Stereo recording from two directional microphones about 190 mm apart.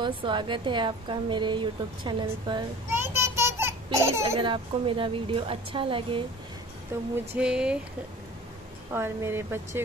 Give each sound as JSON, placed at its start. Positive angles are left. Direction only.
{"t": 0.0, "sound": "a woman's voice", "side_deg": -25}
{"t": 2.9, "sound": "a sound", "side_deg": -15}
{"t": 4.4, "sound": "a woman's voice", "side_deg": -25}
{"t": 6.9, "sound": "speech", "side_deg": -15}
{"t": 8.9, "sound": "speech", "side_deg": -10}